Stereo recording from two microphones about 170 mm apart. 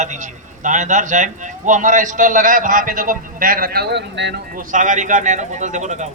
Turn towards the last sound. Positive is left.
turn(degrees=-45)  # may be behind; listen again after turning